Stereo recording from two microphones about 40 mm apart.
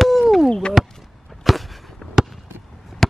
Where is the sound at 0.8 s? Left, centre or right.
Centre.